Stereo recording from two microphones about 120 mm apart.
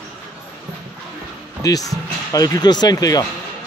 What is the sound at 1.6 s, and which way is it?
Speech, 30° left (ahead or behind).